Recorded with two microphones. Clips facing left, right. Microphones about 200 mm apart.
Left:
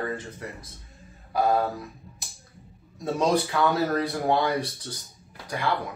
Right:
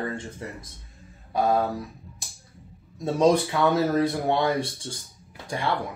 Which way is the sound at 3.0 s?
25° right (ahead or behind).